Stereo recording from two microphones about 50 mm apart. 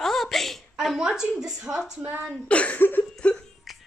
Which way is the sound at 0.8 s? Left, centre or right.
Centre.